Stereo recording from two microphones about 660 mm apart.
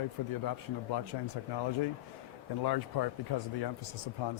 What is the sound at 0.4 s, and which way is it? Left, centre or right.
Speech, left.